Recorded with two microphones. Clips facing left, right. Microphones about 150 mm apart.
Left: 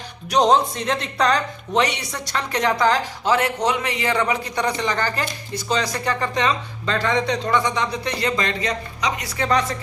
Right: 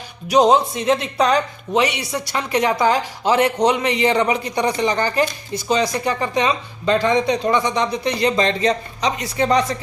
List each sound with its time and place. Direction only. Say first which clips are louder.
0.3 s speech: right 3 dB; 5° right (ahead or behind)